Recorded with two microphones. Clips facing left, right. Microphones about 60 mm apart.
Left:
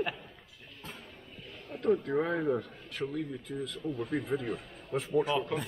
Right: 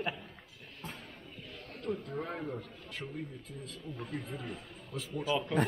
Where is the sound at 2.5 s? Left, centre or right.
Left.